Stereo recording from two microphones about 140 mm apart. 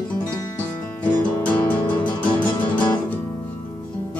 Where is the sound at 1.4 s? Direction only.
10° left (ahead or behind).